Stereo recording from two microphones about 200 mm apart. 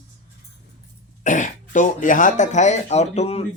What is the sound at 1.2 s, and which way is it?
Speech, 40° left (ahead or behind).